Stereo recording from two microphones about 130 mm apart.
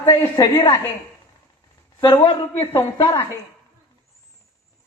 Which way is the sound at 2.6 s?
20° left (ahead or behind).